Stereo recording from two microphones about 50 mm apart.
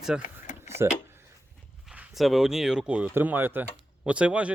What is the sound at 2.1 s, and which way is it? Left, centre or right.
Speech, centre.